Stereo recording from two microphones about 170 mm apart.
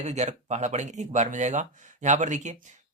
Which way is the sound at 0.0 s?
40° right (ahead or behind).